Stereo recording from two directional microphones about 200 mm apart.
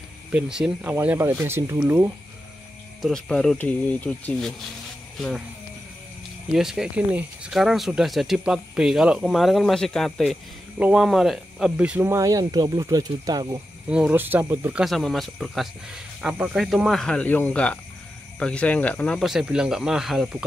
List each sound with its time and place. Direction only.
0.3 s speech: 5° right (ahead or behind)
3.0 s speech: centre (ahead or behind)
6.5 s speech: centre (ahead or behind); by 13.6 s 20° right (ahead or behind)
13.8 s speech: 5° right (ahead or behind)